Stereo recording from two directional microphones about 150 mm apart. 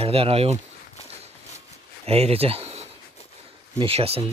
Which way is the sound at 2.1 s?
45° right (ahead or behind).